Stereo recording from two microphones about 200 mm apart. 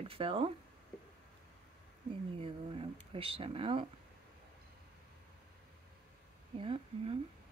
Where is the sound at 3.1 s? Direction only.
25° right (ahead or behind).